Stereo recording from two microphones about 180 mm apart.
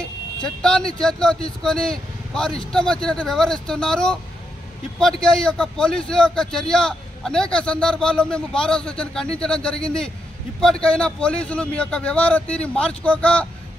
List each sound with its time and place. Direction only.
0.6 s speech: 5° left (ahead or behind)
5.2 s a man's voice: 5° left (ahead or behind)